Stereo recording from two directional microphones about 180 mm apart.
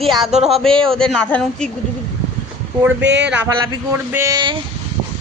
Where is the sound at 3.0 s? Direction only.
75° right (ahead or behind).